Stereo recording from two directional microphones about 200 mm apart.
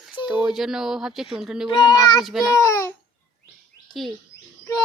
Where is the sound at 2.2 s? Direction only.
Centre (ahead or behind).